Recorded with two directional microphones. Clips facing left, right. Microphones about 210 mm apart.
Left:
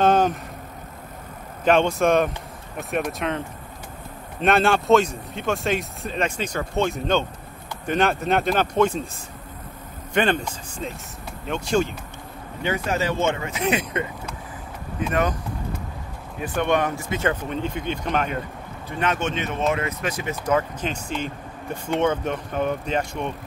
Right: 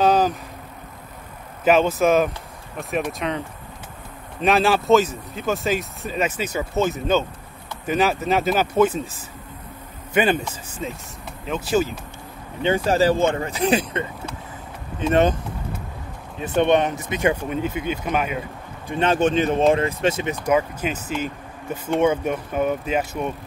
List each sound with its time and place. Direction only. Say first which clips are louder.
0.0 s vehicle: even; centre (ahead or behind)
1.6 s speech: right 1 dB; 5° right (ahead or behind)
10.1 s speech: right 2 dB; 5° right (ahead or behind)
12.6 s speech: right 6 dB; 30° right (ahead or behind)
16.3 s speech: right 4 dB; 25° right (ahead or behind); by 18.4 s 5° right (ahead or behind)
18.9 s speech: right 6 dB; 30° right (ahead or behind)
20.4 s speech: right 2 dB; 10° right (ahead or behind)